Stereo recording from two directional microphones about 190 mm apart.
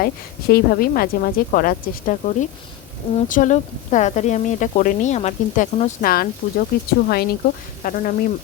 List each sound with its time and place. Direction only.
0.0 s a woman's voice: 55° left (ahead or behind)